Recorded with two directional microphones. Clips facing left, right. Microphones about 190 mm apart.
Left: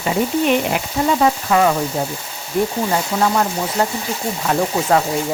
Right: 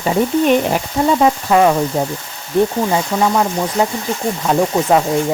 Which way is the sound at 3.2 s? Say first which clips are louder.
Right 2 dB; 10° right (ahead or behind).